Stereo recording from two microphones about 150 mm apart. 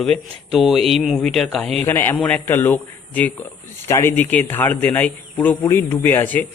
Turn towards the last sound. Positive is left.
turn(degrees=10)  # may be behind; listen again after turning